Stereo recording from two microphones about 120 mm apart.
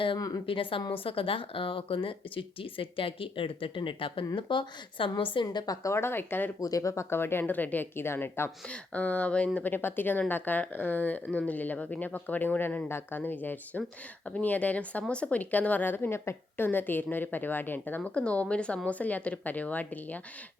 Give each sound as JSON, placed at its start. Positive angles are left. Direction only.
{"t": 0.2, "sound": "a woman's voice", "side_deg": 35}
{"t": 0.4, "sound": "a woman's voice", "side_deg": 45}
{"t": 6.6, "sound": "speech", "side_deg": 30}